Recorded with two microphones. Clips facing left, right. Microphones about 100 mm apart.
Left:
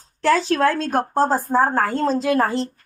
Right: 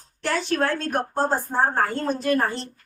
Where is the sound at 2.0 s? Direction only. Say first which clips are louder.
Left 4 dB; 90° left.